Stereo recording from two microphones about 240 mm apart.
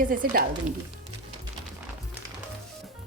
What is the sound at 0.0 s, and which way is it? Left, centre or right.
Speech, right.